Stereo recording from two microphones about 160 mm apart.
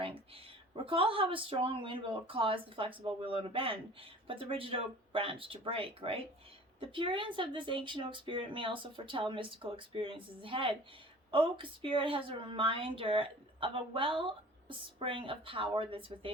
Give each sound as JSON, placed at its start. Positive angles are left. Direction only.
{"t": 0.9, "sound": "a woman's voice", "side_deg": -35}